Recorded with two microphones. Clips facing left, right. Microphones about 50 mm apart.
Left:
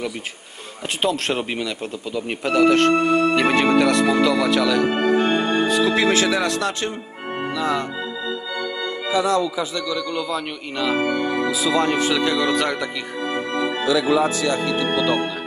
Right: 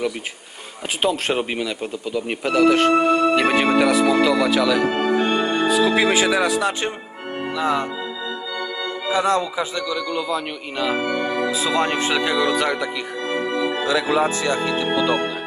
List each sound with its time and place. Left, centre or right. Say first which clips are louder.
1.0 s speech: right 1 dB; centre
4.9 s organ: left 1 dB; centre
5.2 s music: even; centre
5.6 s speech: right 3 dB; centre
9.1 s speech: even; right
10.1 s speech: right 1 dB; centre
11.1 s music: even; centre
11.5 s speech: left 2 dB; right
12.2 s speech: even; centre
13.8 s speech: left 2 dB; right
15.0 s music: right 1 dB; centre